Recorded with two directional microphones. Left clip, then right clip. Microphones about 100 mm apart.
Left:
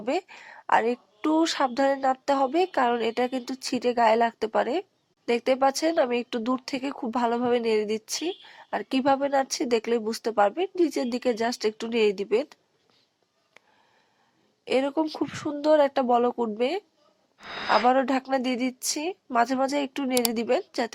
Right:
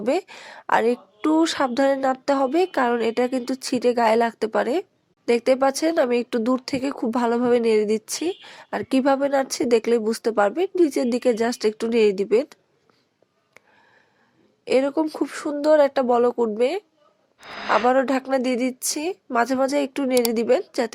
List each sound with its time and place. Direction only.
0.0 s a woman's voice: 40° right (ahead or behind)
14.6 s a woman's voice: 40° right (ahead or behind)